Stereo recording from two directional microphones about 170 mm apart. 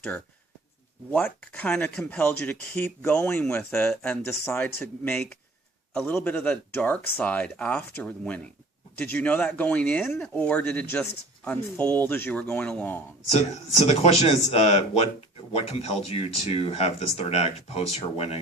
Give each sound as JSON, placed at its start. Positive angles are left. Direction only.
{"t": 1.1, "sound": "speech", "side_deg": 5}
{"t": 13.3, "sound": "speech", "side_deg": 40}